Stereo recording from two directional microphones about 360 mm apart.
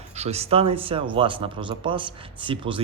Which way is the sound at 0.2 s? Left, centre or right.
Centre.